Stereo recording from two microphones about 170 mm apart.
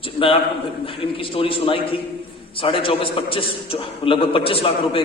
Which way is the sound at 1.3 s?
30° left (ahead or behind).